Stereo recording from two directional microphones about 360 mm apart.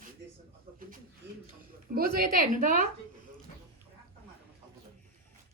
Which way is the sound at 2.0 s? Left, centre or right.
Right.